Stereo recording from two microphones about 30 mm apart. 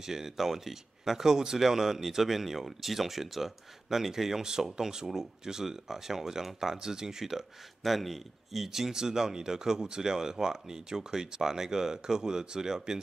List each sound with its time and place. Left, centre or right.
0.0 s speech: centre
7.8 s speech: centre